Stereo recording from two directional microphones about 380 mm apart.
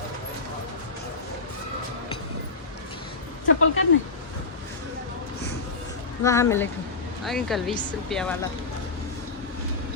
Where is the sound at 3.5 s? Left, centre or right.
Left.